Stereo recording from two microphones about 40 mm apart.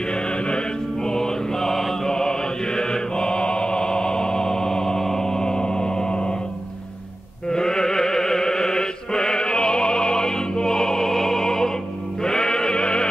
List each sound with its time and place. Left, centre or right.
0.1 s music: left
7.4 s music: centre